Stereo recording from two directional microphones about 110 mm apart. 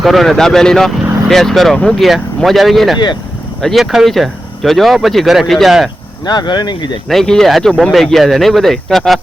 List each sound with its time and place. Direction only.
0.0 s speech: centre (ahead or behind)
6.2 s speech: 40° left (ahead or behind)
7.1 s speech: 5° left (ahead or behind)